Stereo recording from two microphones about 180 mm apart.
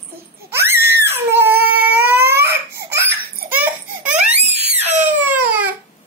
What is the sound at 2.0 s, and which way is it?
Crying, 10° right (ahead or behind).